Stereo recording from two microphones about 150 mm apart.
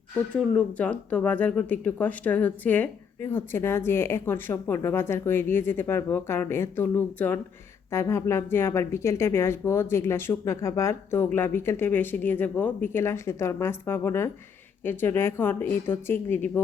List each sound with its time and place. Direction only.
0.5 s speech: 10° left (ahead or behind)